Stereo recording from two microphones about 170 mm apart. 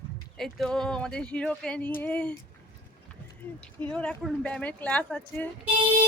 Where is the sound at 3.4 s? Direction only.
10° left (ahead or behind).